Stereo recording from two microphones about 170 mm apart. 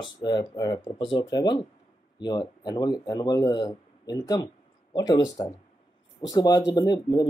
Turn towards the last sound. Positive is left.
turn(degrees=25)  # may be behind; listen again after turning